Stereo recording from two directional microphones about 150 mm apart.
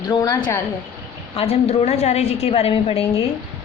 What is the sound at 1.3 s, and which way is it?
A woman's voice, 45° left (ahead or behind).